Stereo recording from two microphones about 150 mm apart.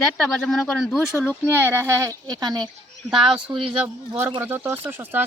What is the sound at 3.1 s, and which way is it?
Speech, 5° right (ahead or behind).